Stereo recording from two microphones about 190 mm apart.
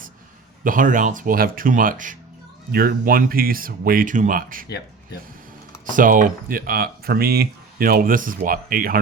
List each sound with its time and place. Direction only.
0.6 s speech: 45° right (ahead or behind)
5.9 s speech: 45° right (ahead or behind)